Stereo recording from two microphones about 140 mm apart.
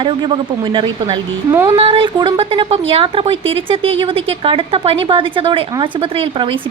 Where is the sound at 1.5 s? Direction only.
20° right (ahead or behind).